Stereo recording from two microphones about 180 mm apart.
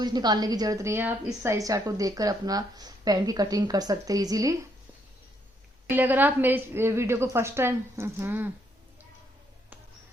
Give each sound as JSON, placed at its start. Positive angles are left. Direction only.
{"t": 0.0, "sound": "a woman's voice", "side_deg": -20}
{"t": 5.9, "sound": "a woman's voice", "side_deg": -10}